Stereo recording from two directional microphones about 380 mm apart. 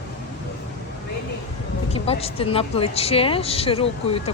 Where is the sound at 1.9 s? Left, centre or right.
Centre.